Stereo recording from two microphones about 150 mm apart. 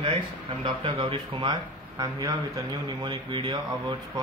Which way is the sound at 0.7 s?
35° right (ahead or behind).